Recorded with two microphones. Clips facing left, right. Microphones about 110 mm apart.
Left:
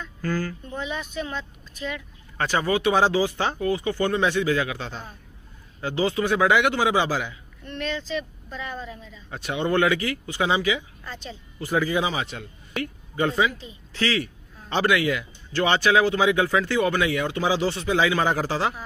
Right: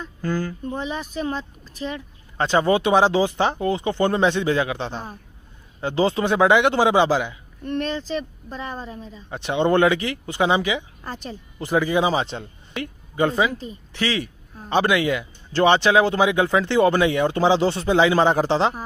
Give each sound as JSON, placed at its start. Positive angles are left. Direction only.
{"t": 0.2, "sound": "speech", "side_deg": -20}
{"t": 0.7, "sound": "speech", "side_deg": -35}
{"t": 7.6, "sound": "speech", "side_deg": -45}
{"t": 9.3, "sound": "speech", "side_deg": -25}